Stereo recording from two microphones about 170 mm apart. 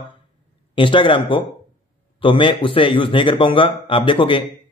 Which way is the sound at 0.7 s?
30° left (ahead or behind).